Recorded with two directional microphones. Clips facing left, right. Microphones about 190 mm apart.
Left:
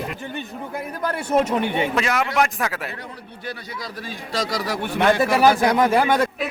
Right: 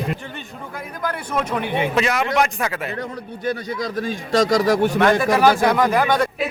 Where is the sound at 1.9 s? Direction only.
Centre (ahead or behind).